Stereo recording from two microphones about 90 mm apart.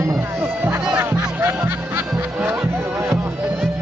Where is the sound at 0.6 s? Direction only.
25° right (ahead or behind).